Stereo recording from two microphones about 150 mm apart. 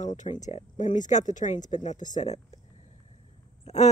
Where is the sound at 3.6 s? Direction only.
50° left (ahead or behind).